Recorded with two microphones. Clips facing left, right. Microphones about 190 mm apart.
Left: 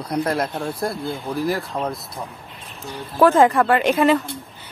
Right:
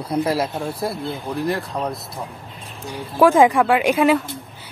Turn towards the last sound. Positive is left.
turn(degrees=-10)  # may be behind; listen again after turning